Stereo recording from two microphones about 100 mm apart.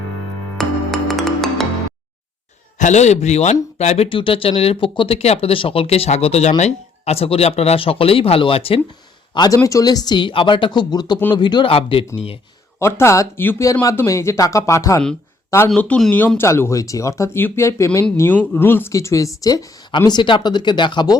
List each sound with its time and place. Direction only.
0.5 s music: centre (ahead or behind)
3.2 s speech: 90° left; by 8.8 s 70° left (ahead or behind)
9.6 s speech: 35° left (ahead or behind)
11.7 s speech: 65° left (ahead or behind)
12.8 s speech: 30° left (ahead or behind)
15.7 s speech: 10° left (ahead or behind)
16.4 s speech: 25° left (ahead or behind)
18.2 s speech: 20° left (ahead or behind); by 19.6 s 35° left (ahead or behind)
20.1 s speech: 50° left (ahead or behind)